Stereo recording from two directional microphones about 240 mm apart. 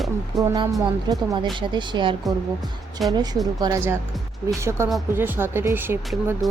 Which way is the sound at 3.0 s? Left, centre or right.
Centre.